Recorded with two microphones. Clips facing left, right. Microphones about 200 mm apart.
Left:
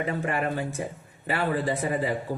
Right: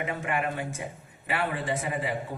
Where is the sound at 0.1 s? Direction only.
35° left (ahead or behind).